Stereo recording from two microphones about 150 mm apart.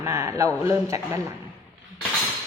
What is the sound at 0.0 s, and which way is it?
A woman's voice, 20° right (ahead or behind).